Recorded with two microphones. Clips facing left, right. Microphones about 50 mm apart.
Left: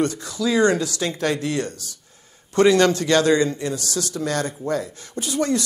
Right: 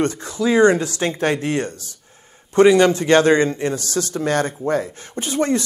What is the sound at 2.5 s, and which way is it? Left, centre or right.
A man's voice, centre.